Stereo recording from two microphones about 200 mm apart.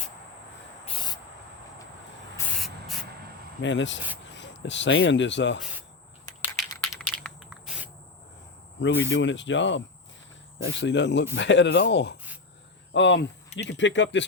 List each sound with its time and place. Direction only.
0.9 s cricket: 20° left (ahead or behind)
2.6 s spray: centre (ahead or behind)
3.6 s speech: 65° left (ahead or behind)
6.6 s a sound: centre (ahead or behind)
8.8 s speech: 70° left (ahead or behind)